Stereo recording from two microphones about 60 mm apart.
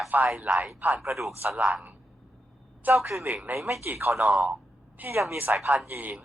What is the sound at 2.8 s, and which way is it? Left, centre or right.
Speech, right.